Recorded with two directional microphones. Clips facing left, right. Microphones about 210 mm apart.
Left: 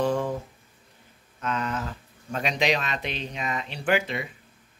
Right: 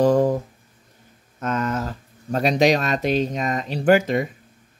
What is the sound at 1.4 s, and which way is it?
Speech, 45° right (ahead or behind).